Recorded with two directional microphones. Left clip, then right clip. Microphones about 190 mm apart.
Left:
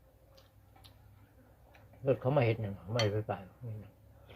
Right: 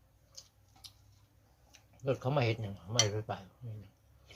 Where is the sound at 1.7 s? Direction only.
25° right (ahead or behind).